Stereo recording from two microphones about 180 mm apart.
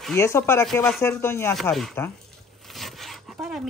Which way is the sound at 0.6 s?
5° left (ahead or behind).